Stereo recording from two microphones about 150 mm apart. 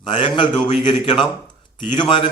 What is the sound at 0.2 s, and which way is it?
A man's voice, 30° left (ahead or behind).